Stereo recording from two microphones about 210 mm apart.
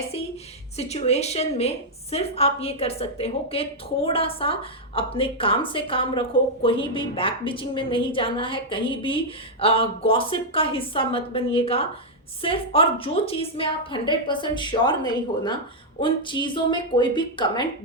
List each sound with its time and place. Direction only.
0.8 s a woman's voice: 30° left (ahead or behind)